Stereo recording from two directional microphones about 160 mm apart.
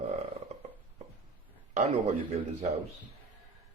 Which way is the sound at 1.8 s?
45° right (ahead or behind).